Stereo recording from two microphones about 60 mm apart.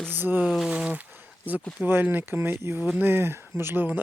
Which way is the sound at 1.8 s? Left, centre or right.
Right.